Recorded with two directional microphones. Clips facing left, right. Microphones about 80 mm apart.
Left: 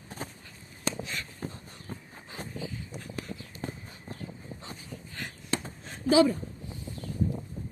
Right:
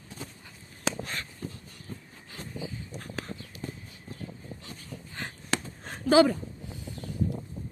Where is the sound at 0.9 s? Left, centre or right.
Right.